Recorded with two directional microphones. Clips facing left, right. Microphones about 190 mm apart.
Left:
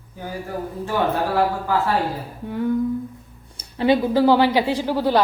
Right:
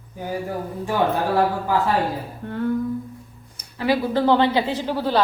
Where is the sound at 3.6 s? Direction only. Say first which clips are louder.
Left 4 dB; 25° left (ahead or behind).